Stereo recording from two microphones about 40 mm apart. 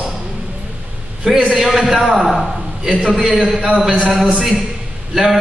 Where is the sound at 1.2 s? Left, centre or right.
Centre.